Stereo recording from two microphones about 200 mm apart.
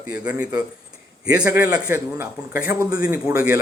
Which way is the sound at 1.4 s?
10° right (ahead or behind).